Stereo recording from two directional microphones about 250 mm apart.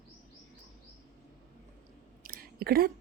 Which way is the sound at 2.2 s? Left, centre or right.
Right.